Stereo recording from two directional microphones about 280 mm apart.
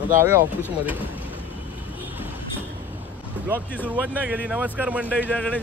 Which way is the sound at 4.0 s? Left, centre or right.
Centre.